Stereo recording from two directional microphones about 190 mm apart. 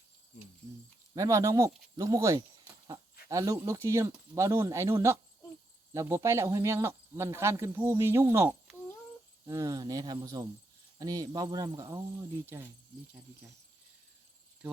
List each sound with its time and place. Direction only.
1.1 s speech: 15° right (ahead or behind)